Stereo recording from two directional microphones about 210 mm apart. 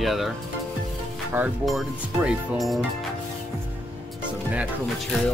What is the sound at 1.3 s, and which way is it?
Speech, 5° right (ahead or behind).